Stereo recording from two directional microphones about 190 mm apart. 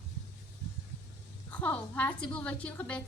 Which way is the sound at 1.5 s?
10° left (ahead or behind).